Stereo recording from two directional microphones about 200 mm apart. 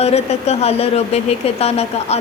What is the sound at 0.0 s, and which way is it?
Speech, 30° left (ahead or behind).